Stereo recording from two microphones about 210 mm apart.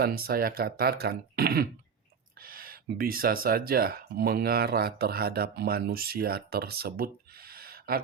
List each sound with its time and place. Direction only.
0.0 s speech: 45° right (ahead or behind)